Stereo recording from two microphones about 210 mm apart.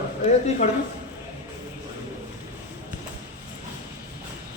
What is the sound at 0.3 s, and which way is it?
Speech, 30° left (ahead or behind).